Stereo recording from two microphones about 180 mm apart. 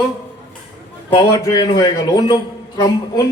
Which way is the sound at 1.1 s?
25° left (ahead or behind).